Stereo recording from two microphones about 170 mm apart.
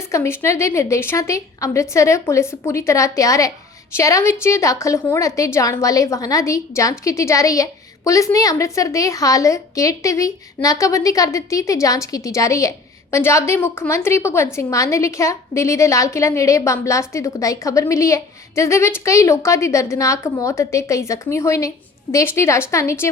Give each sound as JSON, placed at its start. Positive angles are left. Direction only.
{"t": 0.1, "sound": "a woman's voice", "side_deg": 15}